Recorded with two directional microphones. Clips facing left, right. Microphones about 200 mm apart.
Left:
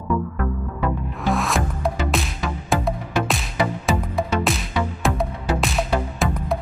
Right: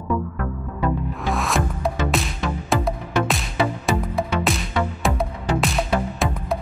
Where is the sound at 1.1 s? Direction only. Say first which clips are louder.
Left 1 dB; centre (ahead or behind).